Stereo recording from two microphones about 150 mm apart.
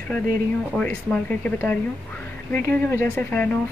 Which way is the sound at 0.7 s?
5° left (ahead or behind).